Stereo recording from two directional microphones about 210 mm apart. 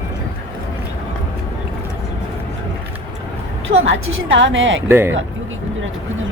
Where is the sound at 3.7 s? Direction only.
65° right (ahead or behind).